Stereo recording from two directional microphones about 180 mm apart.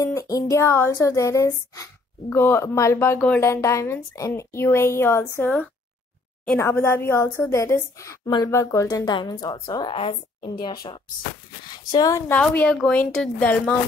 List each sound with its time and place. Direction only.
0.0 s a woman's voice: 15° left (ahead or behind)
12.4 s a woman's voice: 5° left (ahead or behind)